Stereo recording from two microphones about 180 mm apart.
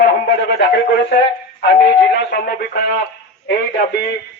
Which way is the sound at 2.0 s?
65° left (ahead or behind).